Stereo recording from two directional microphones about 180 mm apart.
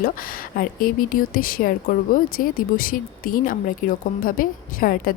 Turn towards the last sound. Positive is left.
turn(degrees=50)  # may be behind; listen again after turning